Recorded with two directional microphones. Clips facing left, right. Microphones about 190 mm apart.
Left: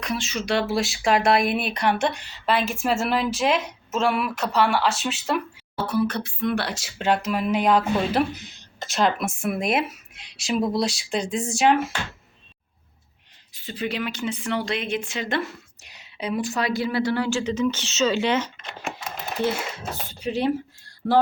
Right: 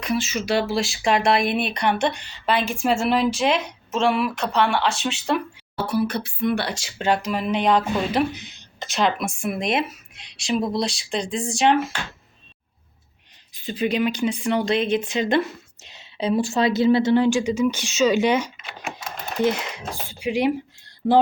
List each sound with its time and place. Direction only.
0.0 s speech: 5° right (ahead or behind)
5.7 s speech: 10° right (ahead or behind)
13.5 s speech: 15° right (ahead or behind)
21.0 s music: 20° right (ahead or behind)